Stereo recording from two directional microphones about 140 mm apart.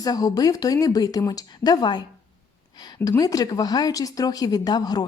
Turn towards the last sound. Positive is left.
turn(degrees=30)  # may be behind; listen again after turning